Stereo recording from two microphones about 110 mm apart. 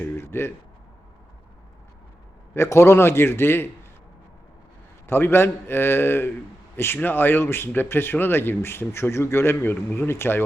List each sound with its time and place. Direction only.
0.0 s speech: 25° left (ahead or behind)
2.6 s speech: 25° left (ahead or behind)
5.0 s speech: 20° left (ahead or behind)